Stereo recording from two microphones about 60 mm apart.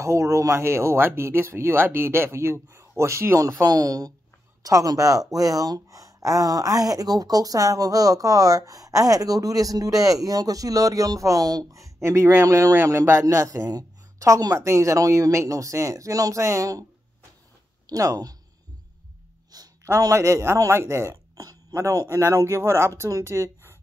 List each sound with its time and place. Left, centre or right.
0.0 s speech: right
4.6 s speech: right
12.4 s speech: right
12.8 s speech: right
13.2 s speech: right
17.8 s speech: right
19.5 s a man's voice: right
21.4 s a sound: right
22.0 s speech: right
23.2 s a sound: right